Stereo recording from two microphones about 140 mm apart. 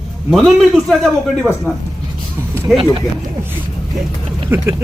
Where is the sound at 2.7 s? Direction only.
5° right (ahead or behind).